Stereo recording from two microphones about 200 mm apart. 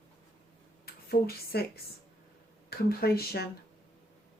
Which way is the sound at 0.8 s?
50° left (ahead or behind).